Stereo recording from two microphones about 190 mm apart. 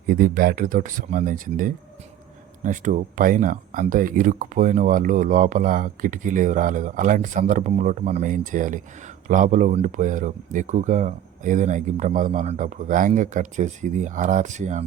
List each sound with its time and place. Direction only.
0.1 s speech: 50° right (ahead or behind)